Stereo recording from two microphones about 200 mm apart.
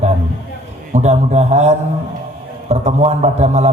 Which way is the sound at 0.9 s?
35° right (ahead or behind).